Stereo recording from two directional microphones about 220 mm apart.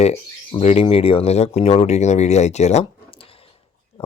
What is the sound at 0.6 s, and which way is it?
Speech, 30° left (ahead or behind).